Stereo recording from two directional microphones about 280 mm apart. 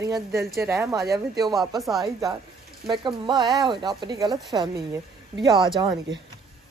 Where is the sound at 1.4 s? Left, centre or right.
Centre.